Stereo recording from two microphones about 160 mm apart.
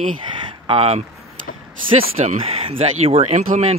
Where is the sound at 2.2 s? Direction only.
40° right (ahead or behind).